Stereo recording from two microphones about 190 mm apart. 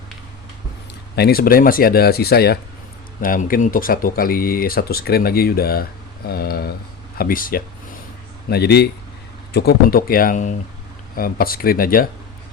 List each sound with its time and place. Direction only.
1.1 s a man's voice: 55° left (ahead or behind)